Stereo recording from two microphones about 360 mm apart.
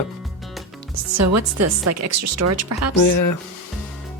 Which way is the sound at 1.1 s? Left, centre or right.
Right.